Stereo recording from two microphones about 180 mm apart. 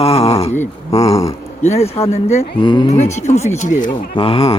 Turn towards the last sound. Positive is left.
turn(degrees=30)  # may be behind; listen again after turning